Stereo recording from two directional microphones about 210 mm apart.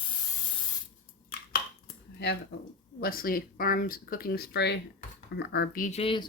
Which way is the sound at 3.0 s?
45° left (ahead or behind).